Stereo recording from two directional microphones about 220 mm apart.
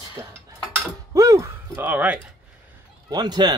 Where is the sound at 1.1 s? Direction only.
15° right (ahead or behind).